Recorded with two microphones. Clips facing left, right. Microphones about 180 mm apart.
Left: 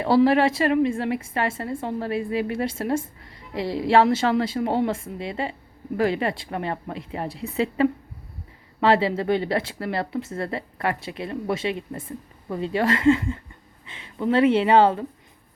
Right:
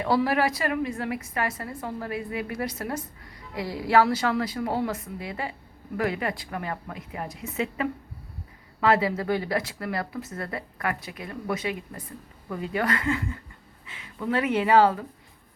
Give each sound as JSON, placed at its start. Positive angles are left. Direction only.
{"t": 0.0, "sound": "a woman's voice", "side_deg": 25}